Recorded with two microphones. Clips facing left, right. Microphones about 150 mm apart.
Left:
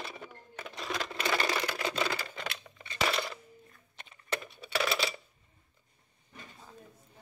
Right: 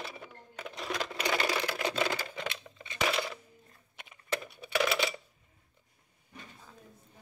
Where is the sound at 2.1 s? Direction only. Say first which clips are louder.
Right 1 dB; 15° right (ahead or behind).